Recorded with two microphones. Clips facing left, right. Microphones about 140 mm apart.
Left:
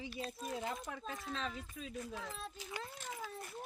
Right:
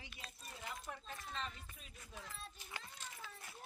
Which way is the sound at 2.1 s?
90° left.